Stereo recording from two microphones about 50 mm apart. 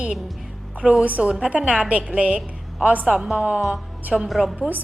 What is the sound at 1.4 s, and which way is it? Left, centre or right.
Speech, right.